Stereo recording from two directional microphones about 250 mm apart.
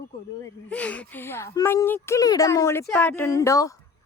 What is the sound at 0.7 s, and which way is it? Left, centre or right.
A woman's voice, centre.